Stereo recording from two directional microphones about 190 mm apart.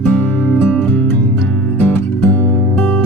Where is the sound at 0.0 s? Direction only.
5° left (ahead or behind).